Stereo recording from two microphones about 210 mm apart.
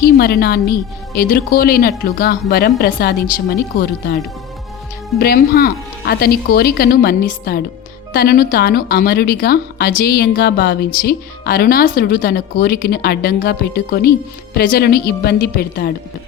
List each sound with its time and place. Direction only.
0.0 s a woman's voice: 50° left (ahead or behind)
5.2 s a woman's voice: 45° left (ahead or behind)